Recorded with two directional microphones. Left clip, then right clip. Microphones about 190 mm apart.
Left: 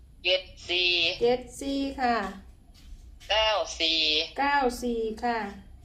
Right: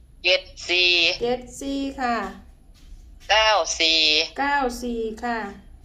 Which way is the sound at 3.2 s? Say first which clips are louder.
Right 7 dB; 60° right (ahead or behind).